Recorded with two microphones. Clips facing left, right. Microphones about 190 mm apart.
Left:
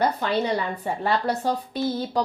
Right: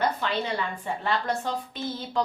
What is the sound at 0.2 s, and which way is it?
A woman's voice, 40° left (ahead or behind).